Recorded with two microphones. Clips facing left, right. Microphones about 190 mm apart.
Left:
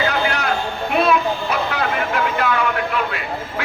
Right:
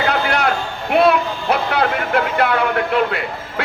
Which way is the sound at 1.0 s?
65° right (ahead or behind).